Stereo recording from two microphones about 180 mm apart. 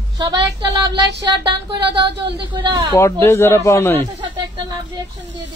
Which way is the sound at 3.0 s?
15° left (ahead or behind).